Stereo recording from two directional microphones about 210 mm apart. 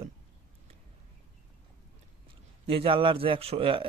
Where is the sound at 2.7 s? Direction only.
25° right (ahead or behind).